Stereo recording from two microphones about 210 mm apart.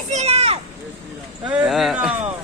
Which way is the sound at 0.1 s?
30° right (ahead or behind).